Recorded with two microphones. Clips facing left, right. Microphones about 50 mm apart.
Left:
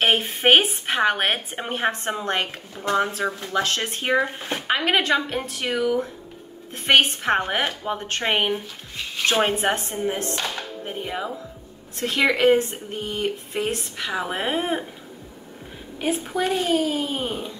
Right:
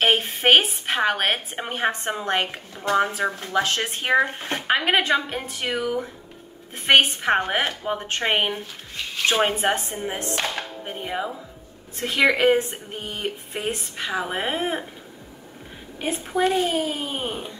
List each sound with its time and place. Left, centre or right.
0.0 s a woman's voice: centre
16.3 s a woman's voice: centre